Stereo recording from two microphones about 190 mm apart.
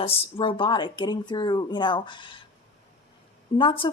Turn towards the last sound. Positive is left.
turn(degrees=25)  # may be behind; listen again after turning